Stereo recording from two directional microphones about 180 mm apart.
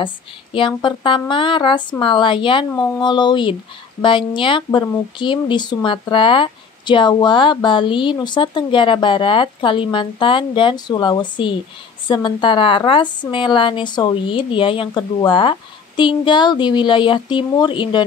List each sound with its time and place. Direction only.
0.0 s speech: 30° left (ahead or behind)